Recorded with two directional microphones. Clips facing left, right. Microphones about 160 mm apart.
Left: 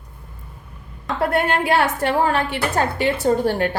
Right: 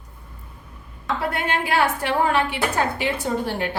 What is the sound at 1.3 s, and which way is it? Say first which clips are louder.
A woman's voice: left 6 dB; 55° left (ahead or behind).